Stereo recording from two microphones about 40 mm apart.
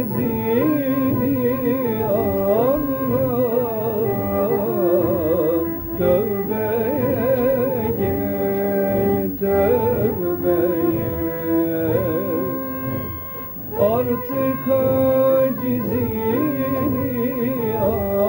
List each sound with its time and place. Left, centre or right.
0.4 s music: centre
0.9 s music: right
11.5 s music: right
13.7 s music: centre
14.7 s music: centre
15.1 s music: right
17.4 s carnatic music: centre